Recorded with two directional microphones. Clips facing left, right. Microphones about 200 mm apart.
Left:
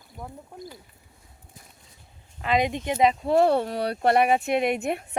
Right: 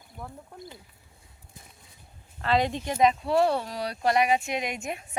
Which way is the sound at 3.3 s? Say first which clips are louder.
Left 4 dB; 50° left (ahead or behind).